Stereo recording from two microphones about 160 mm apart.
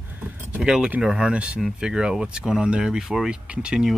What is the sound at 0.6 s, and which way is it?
Speech, 5° right (ahead or behind).